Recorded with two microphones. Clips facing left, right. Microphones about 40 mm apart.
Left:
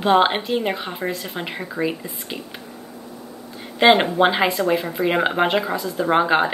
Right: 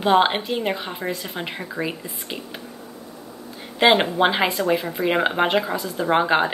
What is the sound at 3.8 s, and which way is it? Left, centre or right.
Speech, centre.